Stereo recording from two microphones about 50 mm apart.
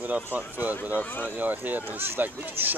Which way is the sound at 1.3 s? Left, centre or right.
Right.